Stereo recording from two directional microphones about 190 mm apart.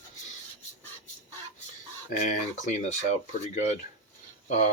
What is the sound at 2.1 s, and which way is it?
Speech, 40° left (ahead or behind).